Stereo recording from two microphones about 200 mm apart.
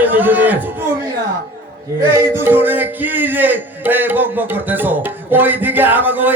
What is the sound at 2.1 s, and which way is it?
Speech, 10° right (ahead or behind).